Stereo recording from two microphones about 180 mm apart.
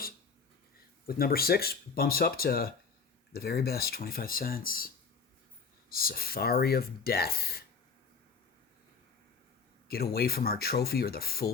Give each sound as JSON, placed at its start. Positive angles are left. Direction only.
{"t": 1.0, "sound": "speech", "side_deg": 55}
{"t": 5.9, "sound": "speech", "side_deg": 55}
{"t": 9.9, "sound": "speech", "side_deg": 60}